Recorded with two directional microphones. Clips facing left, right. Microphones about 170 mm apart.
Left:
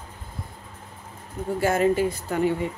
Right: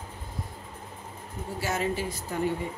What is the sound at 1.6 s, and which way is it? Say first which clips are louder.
Speech: left 9 dB; 55° left (ahead or behind).